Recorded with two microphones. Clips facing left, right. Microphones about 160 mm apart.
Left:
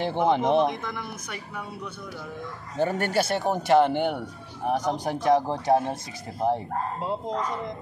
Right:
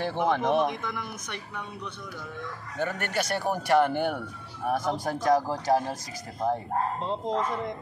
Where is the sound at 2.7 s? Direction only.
30° left (ahead or behind).